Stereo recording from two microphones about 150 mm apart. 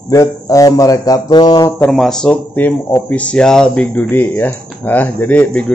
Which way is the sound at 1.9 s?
5° left (ahead or behind).